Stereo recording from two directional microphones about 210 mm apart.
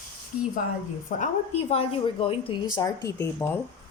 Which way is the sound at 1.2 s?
30° left (ahead or behind).